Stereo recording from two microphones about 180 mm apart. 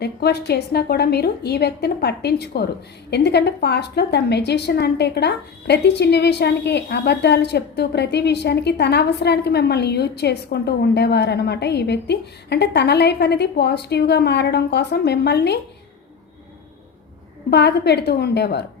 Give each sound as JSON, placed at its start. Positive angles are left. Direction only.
{"t": 0.0, "sound": "a woman's voice", "side_deg": 65}
{"t": 17.5, "sound": "a woman's voice", "side_deg": 65}